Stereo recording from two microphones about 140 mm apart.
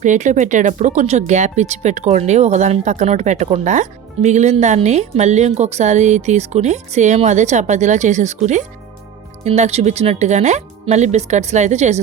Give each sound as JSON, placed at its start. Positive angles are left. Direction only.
{"t": 0.0, "sound": "speech", "side_deg": -60}